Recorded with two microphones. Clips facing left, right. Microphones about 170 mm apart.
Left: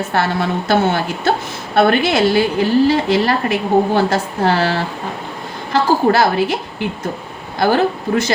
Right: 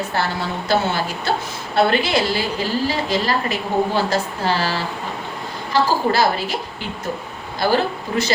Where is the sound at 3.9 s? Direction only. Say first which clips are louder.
Left 4 dB; 55° left (ahead or behind).